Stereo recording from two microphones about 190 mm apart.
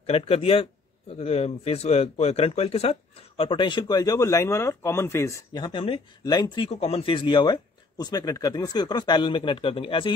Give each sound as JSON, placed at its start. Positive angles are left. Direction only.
{"t": 0.0, "sound": "speech", "side_deg": 30}